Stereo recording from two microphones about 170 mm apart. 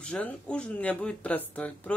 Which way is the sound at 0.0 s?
5° left (ahead or behind).